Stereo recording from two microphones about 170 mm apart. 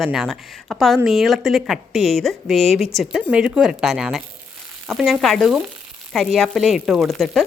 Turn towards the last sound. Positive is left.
turn(degrees=0)  # may be behind; listen again after turning